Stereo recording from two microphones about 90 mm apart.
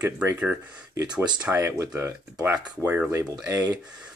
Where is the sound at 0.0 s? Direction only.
20° right (ahead or behind).